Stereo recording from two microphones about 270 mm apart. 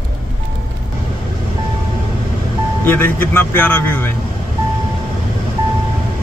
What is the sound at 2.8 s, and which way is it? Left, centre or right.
Speech, centre.